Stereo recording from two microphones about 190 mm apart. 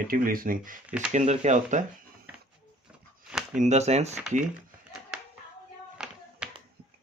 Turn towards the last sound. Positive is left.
turn(degrees=-5)  # may be behind; listen again after turning